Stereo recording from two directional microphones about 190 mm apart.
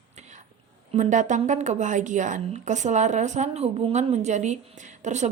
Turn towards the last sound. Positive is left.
turn(degrees=-40)  # may be behind; listen again after turning